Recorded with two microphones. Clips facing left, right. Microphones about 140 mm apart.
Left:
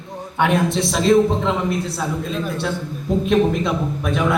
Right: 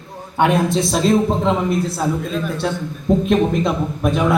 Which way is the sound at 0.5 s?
Centre (ahead or behind).